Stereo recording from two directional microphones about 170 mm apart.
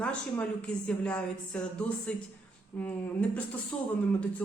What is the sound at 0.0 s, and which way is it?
A woman's voice, 5° left (ahead or behind).